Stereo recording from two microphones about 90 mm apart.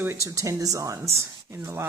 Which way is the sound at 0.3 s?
40° right (ahead or behind).